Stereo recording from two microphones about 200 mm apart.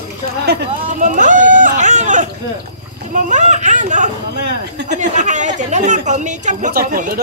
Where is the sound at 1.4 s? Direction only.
40° right (ahead or behind).